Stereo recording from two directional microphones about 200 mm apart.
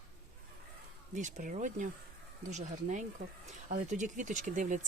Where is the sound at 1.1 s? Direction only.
40° right (ahead or behind).